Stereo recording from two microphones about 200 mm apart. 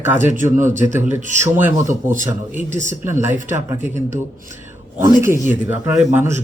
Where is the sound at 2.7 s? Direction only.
35° right (ahead or behind).